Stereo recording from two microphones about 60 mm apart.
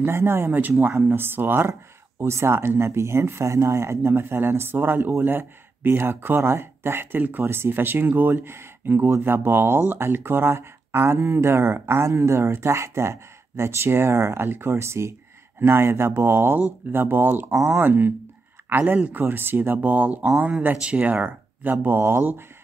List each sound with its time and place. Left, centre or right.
0.0 s speech: right
0.5 s speech: right
1.7 s speech: right
4.1 s speech: right
7.2 s speech: right
19.2 s speech: right
21.8 s speech: right